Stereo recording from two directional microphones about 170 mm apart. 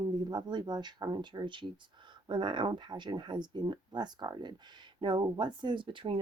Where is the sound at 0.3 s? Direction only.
25° right (ahead or behind).